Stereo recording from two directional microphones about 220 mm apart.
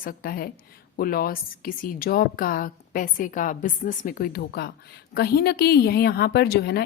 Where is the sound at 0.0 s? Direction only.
40° left (ahead or behind).